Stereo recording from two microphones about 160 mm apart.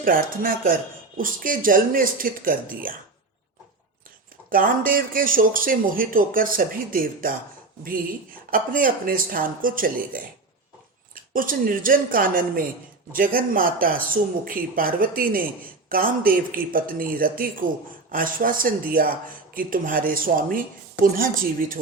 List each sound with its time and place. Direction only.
0.0 s speech: 60° right (ahead or behind)
4.4 s speech: 60° right (ahead or behind)
8.4 s speech: 60° right (ahead or behind)